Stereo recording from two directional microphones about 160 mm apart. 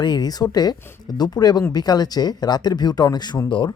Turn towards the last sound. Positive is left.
turn(degrees=30)  # may be behind; listen again after turning